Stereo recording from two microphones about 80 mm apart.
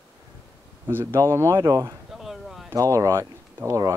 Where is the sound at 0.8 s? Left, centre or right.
Right.